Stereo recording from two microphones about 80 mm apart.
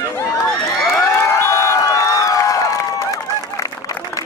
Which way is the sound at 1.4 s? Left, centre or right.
Left.